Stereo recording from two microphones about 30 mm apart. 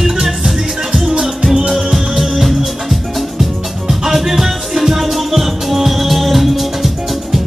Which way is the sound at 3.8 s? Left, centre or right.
Centre.